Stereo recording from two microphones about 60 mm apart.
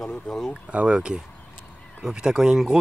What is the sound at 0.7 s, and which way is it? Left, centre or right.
Speech, centre.